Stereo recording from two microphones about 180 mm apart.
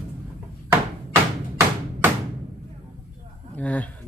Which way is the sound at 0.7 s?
15° right (ahead or behind).